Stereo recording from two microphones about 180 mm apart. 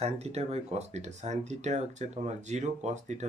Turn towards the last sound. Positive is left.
turn(degrees=-40)  # may be behind; listen again after turning